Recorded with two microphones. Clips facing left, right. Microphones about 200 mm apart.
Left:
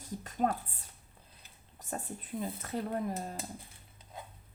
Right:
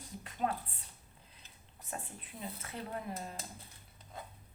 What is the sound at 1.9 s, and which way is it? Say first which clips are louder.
Speech: left 7 dB; 40° left (ahead or behind).